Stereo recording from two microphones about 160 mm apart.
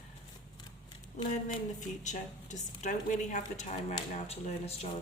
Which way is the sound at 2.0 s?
50° left (ahead or behind).